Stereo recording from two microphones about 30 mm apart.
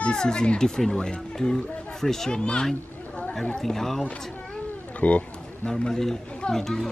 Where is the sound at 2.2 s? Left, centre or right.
Left.